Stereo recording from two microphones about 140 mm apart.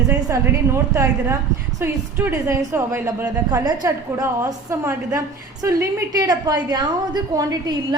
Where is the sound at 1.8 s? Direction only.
15° right (ahead or behind).